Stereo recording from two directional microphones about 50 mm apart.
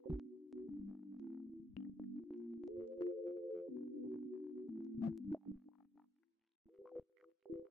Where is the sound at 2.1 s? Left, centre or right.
Centre.